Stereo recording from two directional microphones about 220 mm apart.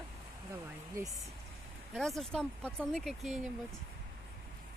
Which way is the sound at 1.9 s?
Centre (ahead or behind).